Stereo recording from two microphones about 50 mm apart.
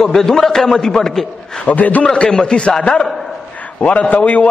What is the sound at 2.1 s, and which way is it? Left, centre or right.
A man's voice, centre.